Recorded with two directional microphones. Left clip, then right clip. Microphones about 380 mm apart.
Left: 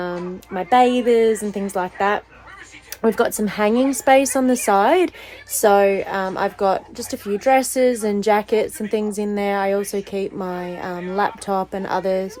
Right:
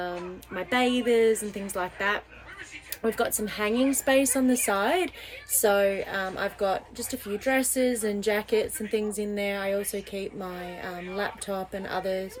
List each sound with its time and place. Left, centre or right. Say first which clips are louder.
0.5 s a woman's voice: left 10 dB; centre